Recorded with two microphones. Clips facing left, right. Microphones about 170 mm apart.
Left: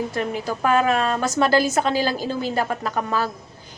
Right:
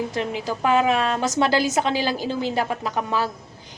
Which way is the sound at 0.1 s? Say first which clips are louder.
Left 1 dB; 20° right (ahead or behind).